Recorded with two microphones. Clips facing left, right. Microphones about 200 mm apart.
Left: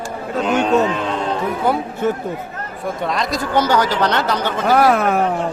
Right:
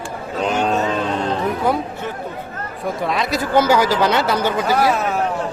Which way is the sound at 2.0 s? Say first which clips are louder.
Left 9 dB; 45° left (ahead or behind).